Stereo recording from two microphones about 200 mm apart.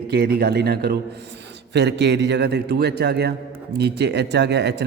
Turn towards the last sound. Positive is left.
turn(degrees=-55)  # may be behind; listen again after turning